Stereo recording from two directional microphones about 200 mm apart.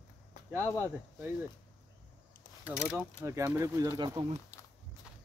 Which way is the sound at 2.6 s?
5° right (ahead or behind).